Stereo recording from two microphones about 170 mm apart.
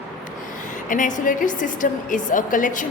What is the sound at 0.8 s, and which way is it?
A woman's voice, 50° left (ahead or behind).